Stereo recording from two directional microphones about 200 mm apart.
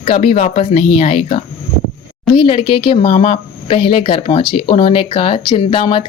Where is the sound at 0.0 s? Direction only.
30° left (ahead or behind).